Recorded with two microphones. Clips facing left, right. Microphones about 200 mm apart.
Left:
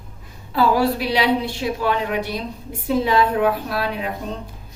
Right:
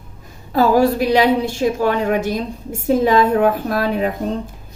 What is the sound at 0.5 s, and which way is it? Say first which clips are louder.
A woman's voice: right 4 dB; 45° right (ahead or behind).